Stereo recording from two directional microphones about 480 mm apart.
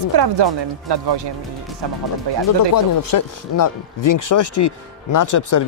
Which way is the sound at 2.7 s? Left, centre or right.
Left.